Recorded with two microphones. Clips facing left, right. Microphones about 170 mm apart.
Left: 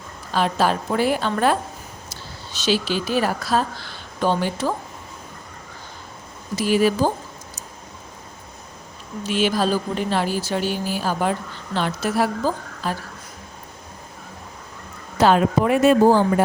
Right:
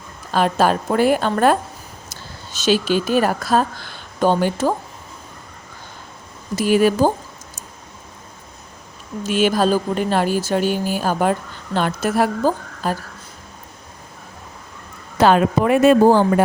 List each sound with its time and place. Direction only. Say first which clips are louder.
0.3 s a woman's voice: right 3 dB; 50° right (ahead or behind)
6.6 s a woman's voice: right 3 dB; 50° right (ahead or behind)
9.2 s a woman's voice: right 4 dB; 50° right (ahead or behind)
15.2 s speech: right 2 dB; 65° right (ahead or behind)